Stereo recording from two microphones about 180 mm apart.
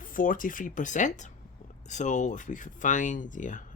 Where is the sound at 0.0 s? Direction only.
50° left (ahead or behind).